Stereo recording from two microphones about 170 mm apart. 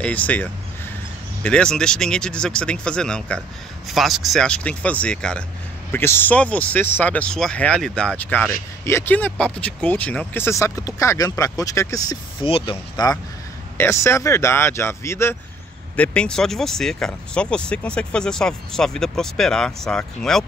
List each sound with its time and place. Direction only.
0.0 s speech: 10° left (ahead or behind)